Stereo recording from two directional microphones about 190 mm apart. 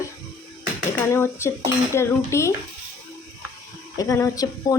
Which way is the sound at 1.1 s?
15° left (ahead or behind).